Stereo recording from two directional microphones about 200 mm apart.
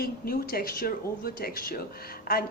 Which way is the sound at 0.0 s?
50° left (ahead or behind).